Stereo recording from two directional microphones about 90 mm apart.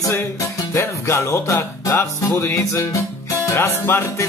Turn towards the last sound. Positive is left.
turn(degrees=30)  # may be behind; listen again after turning